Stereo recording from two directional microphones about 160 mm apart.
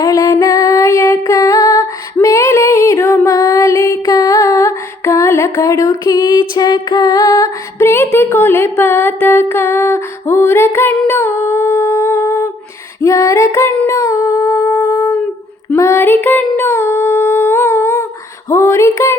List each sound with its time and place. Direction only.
0.0 s female singing: 20° left (ahead or behind)
2.1 s music: 20° left (ahead or behind)
13.0 s female singing: 20° left (ahead or behind)
14.7 s a sound: 10° left (ahead or behind)
18.4 s female singing: 15° left (ahead or behind)